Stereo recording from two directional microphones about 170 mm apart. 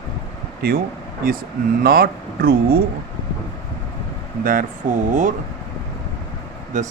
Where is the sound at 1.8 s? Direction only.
60° right (ahead or behind).